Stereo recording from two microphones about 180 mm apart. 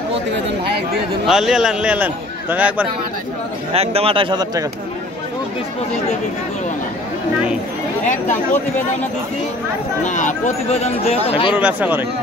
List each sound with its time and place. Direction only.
0.7 s a sound: 60° right (ahead or behind)
1.2 s a man's voice: centre (ahead or behind)
3.7 s a man's voice: 35° right (ahead or behind)
10.0 s speech: 45° left (ahead or behind)
11.5 s speech: 10° right (ahead or behind)